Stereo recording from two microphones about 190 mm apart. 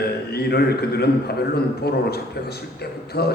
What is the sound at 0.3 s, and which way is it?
A man's voice, 55° left (ahead or behind).